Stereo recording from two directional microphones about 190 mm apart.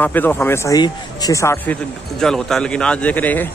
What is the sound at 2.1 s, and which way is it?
A man's voice, 5° left (ahead or behind).